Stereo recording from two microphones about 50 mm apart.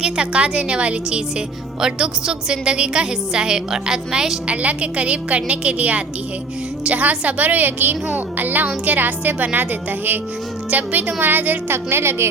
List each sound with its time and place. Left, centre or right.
0.0 s a woman's voice: right
4.4 s a woman's voice: right
10.7 s a woman's voice: right
11.7 s a woman's voice: right